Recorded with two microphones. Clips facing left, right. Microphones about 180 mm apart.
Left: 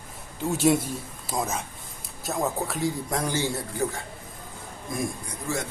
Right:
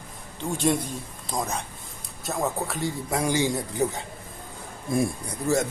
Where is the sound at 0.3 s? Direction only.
5° left (ahead or behind); by 4.0 s 20° right (ahead or behind).